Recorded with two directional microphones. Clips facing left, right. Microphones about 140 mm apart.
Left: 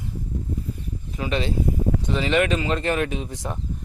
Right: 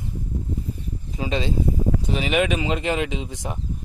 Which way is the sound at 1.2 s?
25° right (ahead or behind).